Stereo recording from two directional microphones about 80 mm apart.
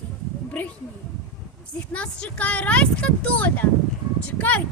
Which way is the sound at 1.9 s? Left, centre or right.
Centre.